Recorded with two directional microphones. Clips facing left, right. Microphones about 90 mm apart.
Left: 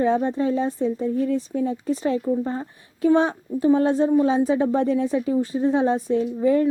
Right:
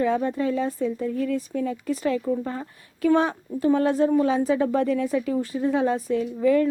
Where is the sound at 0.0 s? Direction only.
25° left (ahead or behind).